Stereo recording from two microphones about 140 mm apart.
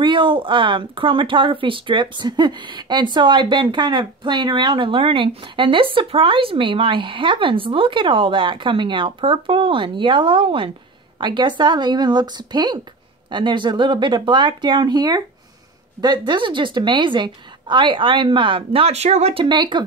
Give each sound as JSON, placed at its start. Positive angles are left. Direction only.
{"t": 0.0, "sound": "speech", "side_deg": -35}
{"t": 19.4, "sound": "speech", "side_deg": -35}